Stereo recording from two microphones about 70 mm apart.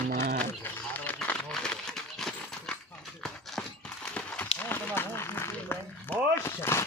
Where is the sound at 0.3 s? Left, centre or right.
Left.